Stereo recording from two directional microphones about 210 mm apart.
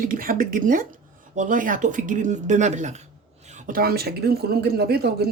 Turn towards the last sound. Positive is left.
turn(degrees=-50)  # may be behind; listen again after turning